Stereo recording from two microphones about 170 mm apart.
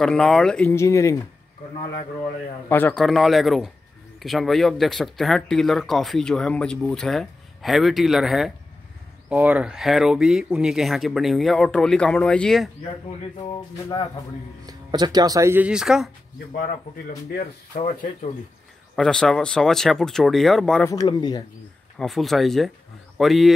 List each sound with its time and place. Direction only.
0.0 s speech: 5° left (ahead or behind)
2.7 s speech: 10° left (ahead or behind)
14.7 s speech: 25° right (ahead or behind); by 16.1 s 5° right (ahead or behind)
16.5 s speech: 60° left (ahead or behind)
17.7 s speech: 45° left (ahead or behind)
18.9 s speech: 5° left (ahead or behind)
20.8 s speech: 20° left (ahead or behind)
21.9 s speech: centre (ahead or behind)